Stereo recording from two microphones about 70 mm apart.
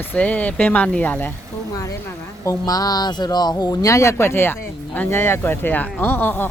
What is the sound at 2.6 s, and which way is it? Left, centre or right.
Speech, left.